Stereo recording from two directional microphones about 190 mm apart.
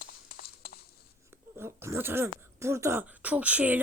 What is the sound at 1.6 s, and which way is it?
Speech, 15° right (ahead or behind).